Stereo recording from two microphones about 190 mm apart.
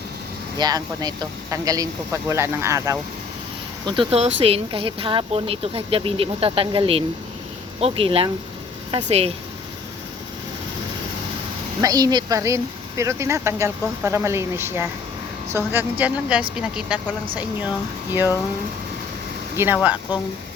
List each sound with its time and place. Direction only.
0.6 s speech: 20° right (ahead or behind)
11.8 s speech: 20° right (ahead or behind)
19.5 s speech: 10° right (ahead or behind)